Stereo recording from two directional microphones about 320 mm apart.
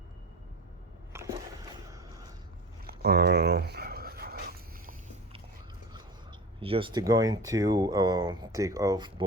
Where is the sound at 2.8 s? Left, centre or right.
Right.